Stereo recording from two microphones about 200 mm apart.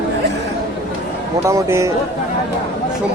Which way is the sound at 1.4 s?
15° right (ahead or behind).